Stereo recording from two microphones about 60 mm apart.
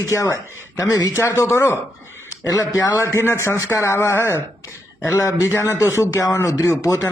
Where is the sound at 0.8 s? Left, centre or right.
Left.